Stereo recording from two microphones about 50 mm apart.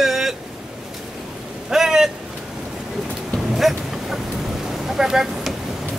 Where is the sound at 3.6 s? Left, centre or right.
Centre.